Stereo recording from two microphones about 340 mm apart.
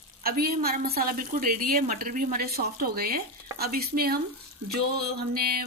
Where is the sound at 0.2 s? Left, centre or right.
Right.